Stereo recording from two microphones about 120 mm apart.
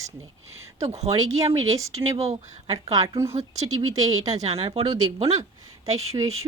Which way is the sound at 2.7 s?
30° right (ahead or behind).